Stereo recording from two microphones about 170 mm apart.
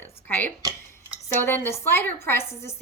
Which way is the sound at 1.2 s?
15° left (ahead or behind).